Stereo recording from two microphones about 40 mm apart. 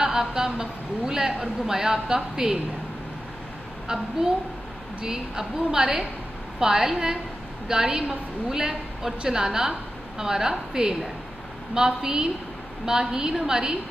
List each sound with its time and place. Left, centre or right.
0.0 s a woman's voice: centre
3.8 s a woman's voice: centre